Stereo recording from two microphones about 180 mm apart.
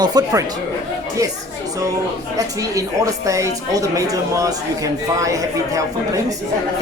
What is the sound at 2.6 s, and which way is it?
A woman's voice, 20° right (ahead or behind).